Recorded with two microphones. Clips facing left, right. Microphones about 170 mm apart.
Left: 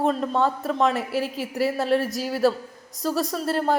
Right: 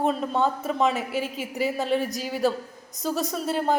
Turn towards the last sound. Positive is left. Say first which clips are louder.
# left 1 dB
turn(degrees=0)  # may be behind; listen again after turning